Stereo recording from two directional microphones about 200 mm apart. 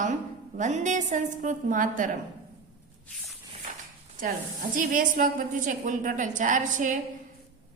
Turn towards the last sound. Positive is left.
turn(degrees=-40)  # may be behind; listen again after turning